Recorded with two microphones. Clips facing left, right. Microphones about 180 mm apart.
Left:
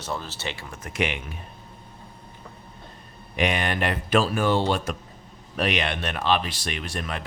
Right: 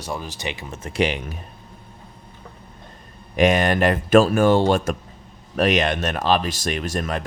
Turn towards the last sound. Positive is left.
turn(degrees=-45)  # may be behind; listen again after turning